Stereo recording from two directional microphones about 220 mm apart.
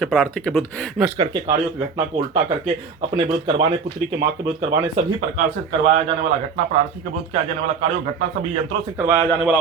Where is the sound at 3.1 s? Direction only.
25° right (ahead or behind).